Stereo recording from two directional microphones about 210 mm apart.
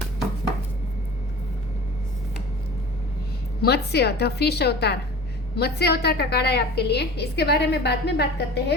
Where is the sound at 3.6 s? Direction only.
50° left (ahead or behind).